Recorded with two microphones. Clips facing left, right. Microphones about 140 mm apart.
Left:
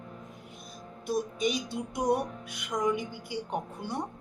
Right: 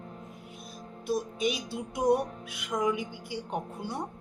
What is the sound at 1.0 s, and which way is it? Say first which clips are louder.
A woman's voice: even; 5° right (ahead or behind).